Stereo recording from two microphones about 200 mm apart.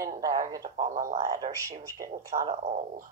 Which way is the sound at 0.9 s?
40° right (ahead or behind).